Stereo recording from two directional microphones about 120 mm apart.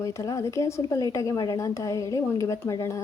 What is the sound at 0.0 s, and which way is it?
Speech, 25° left (ahead or behind).